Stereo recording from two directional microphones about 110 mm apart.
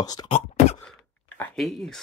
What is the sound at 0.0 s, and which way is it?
Beatboxing, 35° left (ahead or behind).